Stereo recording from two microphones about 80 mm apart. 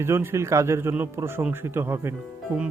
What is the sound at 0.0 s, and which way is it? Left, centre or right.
A man's voice, right.